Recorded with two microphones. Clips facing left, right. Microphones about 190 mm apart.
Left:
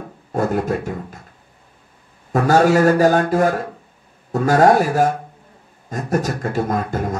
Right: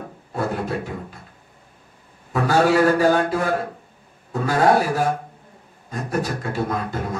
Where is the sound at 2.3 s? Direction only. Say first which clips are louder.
Left 3 dB; 45° left (ahead or behind).